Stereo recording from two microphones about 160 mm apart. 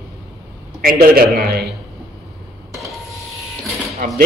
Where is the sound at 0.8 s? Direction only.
65° right (ahead or behind).